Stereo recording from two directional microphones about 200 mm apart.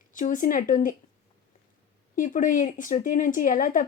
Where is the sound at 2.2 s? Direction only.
40° left (ahead or behind).